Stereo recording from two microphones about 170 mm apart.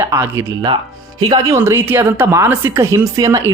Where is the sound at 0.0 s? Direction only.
15° right (ahead or behind).